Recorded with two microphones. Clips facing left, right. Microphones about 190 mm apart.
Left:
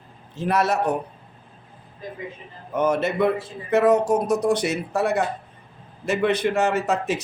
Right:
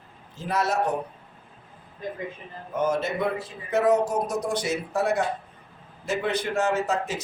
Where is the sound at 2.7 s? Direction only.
65° left (ahead or behind).